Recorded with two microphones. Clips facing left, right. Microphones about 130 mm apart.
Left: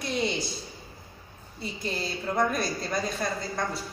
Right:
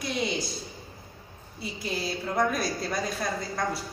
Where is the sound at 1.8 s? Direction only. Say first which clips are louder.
Even; centre (ahead or behind).